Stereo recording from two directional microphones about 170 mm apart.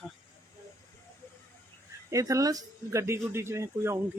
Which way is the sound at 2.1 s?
20° right (ahead or behind).